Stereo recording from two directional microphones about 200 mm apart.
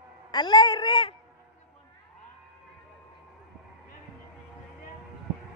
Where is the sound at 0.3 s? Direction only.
25° left (ahead or behind).